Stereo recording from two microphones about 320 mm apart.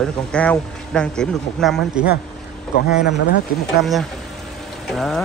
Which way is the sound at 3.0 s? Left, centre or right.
Left.